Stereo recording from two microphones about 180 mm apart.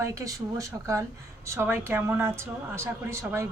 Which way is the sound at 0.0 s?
15° right (ahead or behind).